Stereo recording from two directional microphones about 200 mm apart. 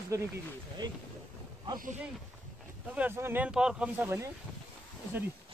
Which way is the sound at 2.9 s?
10° right (ahead or behind).